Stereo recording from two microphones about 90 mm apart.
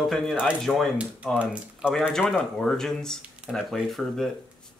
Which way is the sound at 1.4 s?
10° right (ahead or behind).